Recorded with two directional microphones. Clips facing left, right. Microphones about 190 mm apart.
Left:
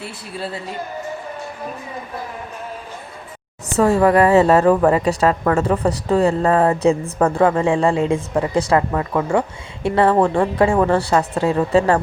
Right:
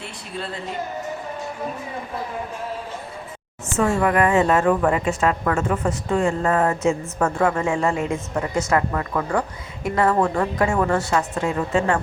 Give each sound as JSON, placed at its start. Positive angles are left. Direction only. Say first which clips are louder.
{"t": 3.8, "sound": "a woman's voice", "louder": "left 5 dB", "side_deg": 35}